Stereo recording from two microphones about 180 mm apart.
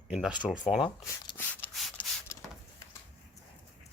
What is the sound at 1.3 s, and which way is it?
Rub, 10° left (ahead or behind).